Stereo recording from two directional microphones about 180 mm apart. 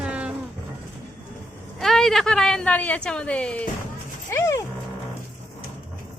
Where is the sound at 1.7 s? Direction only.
Centre (ahead or behind).